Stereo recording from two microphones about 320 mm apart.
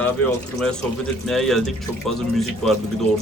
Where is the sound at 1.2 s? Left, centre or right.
Centre.